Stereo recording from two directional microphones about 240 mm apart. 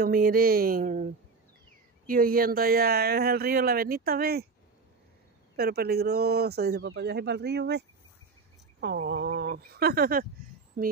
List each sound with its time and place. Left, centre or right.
0.0 s speech: right
5.6 s speech: right
8.8 s speech: right